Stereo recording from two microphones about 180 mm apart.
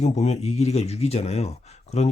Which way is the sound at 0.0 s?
40° left (ahead or behind).